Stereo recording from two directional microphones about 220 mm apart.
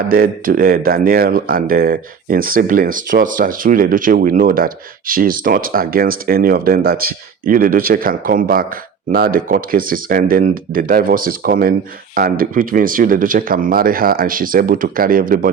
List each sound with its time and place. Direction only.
0.1 s speech: 40° right (ahead or behind)